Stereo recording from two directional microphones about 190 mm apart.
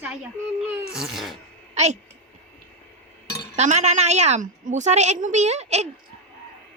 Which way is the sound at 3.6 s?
35° right (ahead or behind).